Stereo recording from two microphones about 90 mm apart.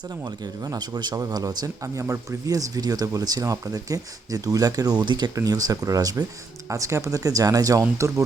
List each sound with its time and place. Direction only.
0.6 s a man's voice: 50° right (ahead or behind)